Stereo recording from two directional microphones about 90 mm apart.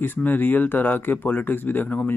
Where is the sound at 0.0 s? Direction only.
20° left (ahead or behind).